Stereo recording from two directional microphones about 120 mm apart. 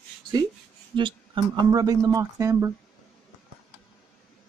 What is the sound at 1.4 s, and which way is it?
Speech, 45° right (ahead or behind).